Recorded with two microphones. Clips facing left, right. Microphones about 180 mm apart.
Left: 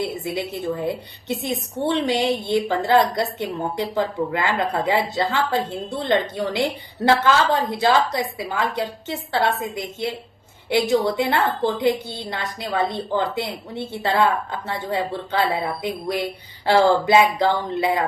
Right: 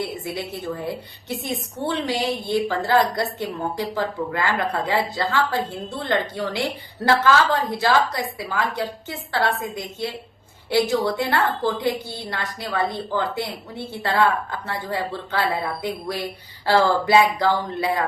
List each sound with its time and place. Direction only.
0.0 s speech: 20° left (ahead or behind)